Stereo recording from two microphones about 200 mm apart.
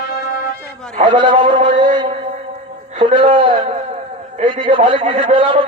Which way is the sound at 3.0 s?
25° right (ahead or behind).